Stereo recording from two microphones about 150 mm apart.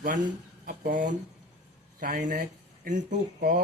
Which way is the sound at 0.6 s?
80° right.